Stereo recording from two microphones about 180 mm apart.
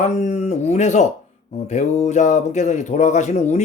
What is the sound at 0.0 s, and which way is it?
Speech, 40° left (ahead or behind).